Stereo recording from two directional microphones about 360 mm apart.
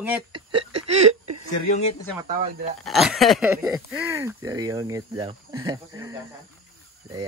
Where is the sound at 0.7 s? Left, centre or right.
Right.